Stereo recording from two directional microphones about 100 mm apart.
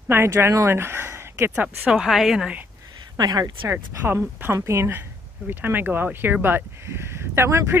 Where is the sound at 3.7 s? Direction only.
20° right (ahead or behind).